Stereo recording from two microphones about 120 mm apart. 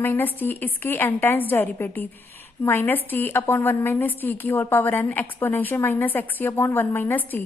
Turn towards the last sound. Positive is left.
turn(degrees=15)  # may be behind; listen again after turning